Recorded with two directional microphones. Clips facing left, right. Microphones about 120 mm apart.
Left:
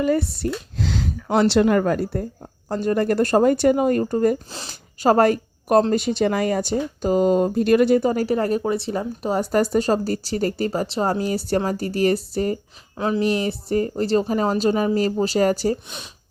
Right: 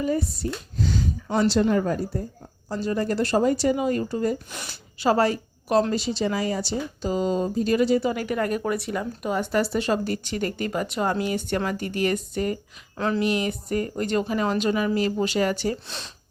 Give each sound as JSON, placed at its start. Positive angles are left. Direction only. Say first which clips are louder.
{"t": 0.0, "sound": "speech", "louder": "left 5 dB", "side_deg": 75}
{"t": 2.6, "sound": "speech", "louder": "left 5 dB", "side_deg": 55}
{"t": 4.4, "sound": "speech", "louder": "left 1 dB", "side_deg": 30}
{"t": 4.9, "sound": "a woman's voice", "louder": "left 5 dB", "side_deg": 45}
{"t": 15.9, "sound": "speech", "louder": "even", "side_deg": 15}